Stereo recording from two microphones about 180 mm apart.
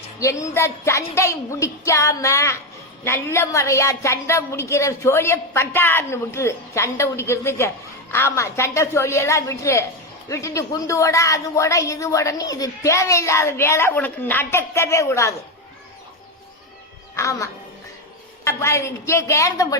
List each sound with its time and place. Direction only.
0.2 s a woman's voice: 15° left (ahead or behind)
17.2 s a woman's voice: 15° left (ahead or behind)